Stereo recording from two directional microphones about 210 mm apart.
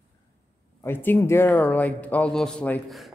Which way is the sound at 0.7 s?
10° left (ahead or behind).